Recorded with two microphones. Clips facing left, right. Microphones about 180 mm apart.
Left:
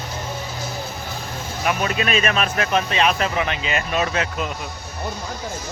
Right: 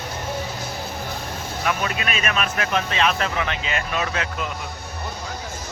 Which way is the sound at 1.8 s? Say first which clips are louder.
Left 5 dB; 30° left (ahead or behind).